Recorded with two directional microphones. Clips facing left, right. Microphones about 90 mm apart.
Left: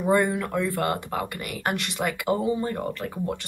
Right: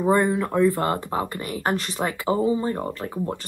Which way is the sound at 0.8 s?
30° right (ahead or behind).